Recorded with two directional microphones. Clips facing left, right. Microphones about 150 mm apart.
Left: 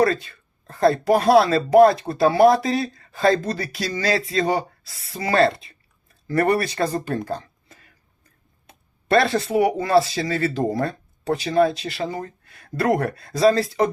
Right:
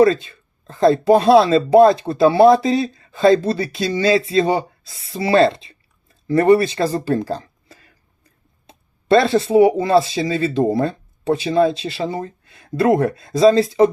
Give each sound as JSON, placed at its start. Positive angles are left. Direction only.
{"t": 0.0, "sound": "speech", "side_deg": -25}